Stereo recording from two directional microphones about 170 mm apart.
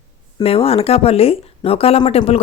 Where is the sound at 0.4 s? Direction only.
35° left (ahead or behind).